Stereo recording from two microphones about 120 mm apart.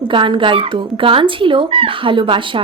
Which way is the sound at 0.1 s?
45° right (ahead or behind).